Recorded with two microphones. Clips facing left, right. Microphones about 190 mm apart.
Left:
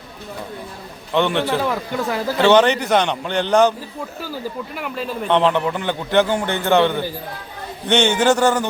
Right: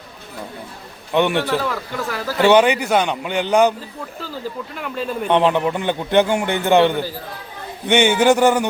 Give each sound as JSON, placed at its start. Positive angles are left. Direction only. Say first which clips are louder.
{"t": 1.1, "sound": "a man's voice", "louder": "right 1 dB", "side_deg": -15}
{"t": 1.4, "sound": "a man's voice", "louder": "left 1 dB", "side_deg": 20}
{"t": 2.4, "sound": "a man's voice", "louder": "right 1 dB", "side_deg": -10}
{"t": 4.7, "sound": "speech", "louder": "right 1 dB", "side_deg": 5}
{"t": 5.3, "sound": "a man's voice", "louder": "right 1 dB", "side_deg": -15}